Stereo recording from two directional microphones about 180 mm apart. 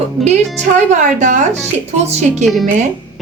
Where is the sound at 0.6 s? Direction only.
40° right (ahead or behind).